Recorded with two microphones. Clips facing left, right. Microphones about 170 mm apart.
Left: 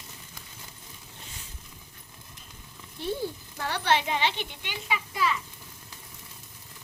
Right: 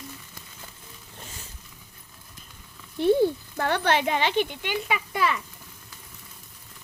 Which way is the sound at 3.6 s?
55° right (ahead or behind).